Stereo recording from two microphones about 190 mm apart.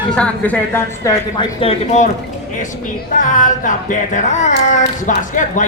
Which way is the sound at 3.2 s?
40° left (ahead or behind).